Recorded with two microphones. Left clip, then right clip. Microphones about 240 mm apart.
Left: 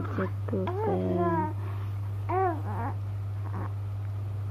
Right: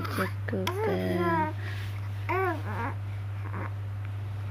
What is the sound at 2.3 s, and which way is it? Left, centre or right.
Babbling, right.